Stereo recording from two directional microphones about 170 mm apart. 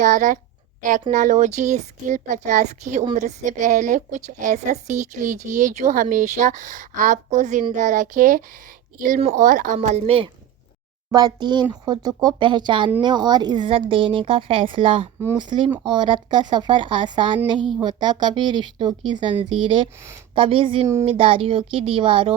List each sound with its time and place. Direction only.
0.0 s a woman's voice: 45° right (ahead or behind)
11.1 s a woman's voice: 20° right (ahead or behind)
20.3 s speech: 30° right (ahead or behind)